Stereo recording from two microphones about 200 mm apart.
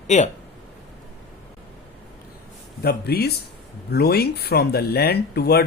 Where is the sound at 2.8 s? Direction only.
50° left (ahead or behind).